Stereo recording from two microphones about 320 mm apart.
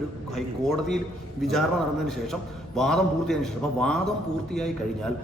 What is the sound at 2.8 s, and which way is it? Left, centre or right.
A man's voice, centre.